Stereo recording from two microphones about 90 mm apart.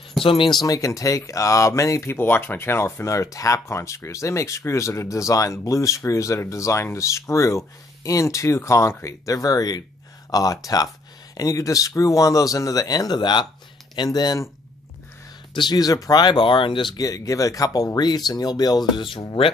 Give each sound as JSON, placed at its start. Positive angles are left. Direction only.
{"t": 0.2, "sound": "speech", "side_deg": 75}
{"t": 0.5, "sound": "speech", "side_deg": 50}
{"t": 0.7, "sound": "speech", "side_deg": 35}
{"t": 15.5, "sound": "speech", "side_deg": 55}
{"t": 17.0, "sound": "speech", "side_deg": 40}